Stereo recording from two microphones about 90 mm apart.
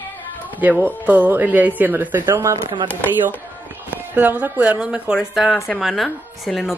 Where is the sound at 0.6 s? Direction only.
20° right (ahead or behind).